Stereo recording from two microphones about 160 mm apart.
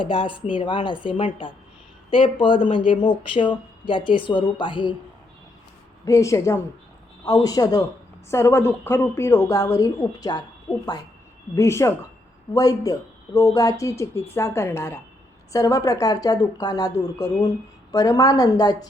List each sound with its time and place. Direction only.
0.0 s speech: 30° left (ahead or behind)
6.1 s speech: 20° left (ahead or behind)
11.5 s speech: 20° left (ahead or behind)